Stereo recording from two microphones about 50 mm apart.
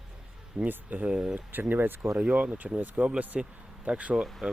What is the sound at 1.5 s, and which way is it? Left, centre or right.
Speech, right.